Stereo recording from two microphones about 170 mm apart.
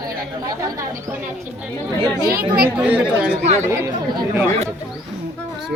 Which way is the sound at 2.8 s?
10° right (ahead or behind).